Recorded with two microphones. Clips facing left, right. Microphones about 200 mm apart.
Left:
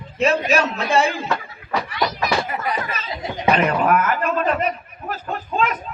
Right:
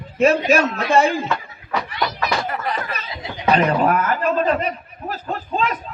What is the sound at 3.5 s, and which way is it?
Speech, 35° right (ahead or behind).